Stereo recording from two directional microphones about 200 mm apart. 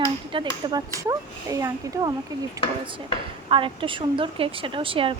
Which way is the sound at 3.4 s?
25° right (ahead or behind).